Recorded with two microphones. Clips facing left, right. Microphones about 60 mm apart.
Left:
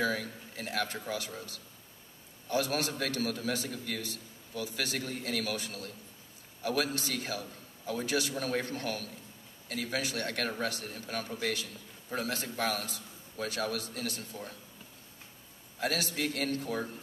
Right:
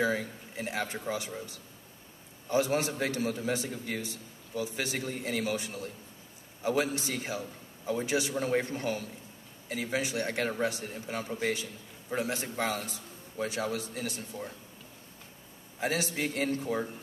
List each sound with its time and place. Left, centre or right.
0.0 s a man's voice: right
15.8 s a man's voice: right